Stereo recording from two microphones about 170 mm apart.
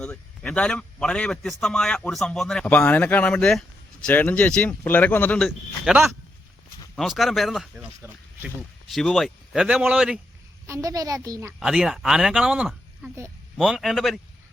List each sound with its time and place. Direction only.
0.0 s a man's voice: 5° left (ahead or behind)
5.5 s a man's voice: centre (ahead or behind)
8.0 s speech: 10° right (ahead or behind)
8.9 s a man's voice: centre (ahead or behind)
10.7 s a woman's voice: 20° right (ahead or behind)
11.6 s a man's voice: 5° right (ahead or behind)